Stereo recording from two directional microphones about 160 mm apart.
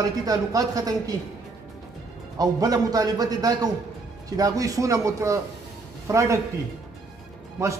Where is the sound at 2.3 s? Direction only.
20° right (ahead or behind).